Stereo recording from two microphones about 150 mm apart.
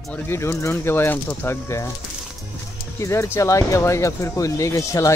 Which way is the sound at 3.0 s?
20° left (ahead or behind).